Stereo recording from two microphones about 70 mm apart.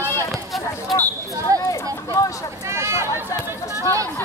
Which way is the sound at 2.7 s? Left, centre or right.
Right.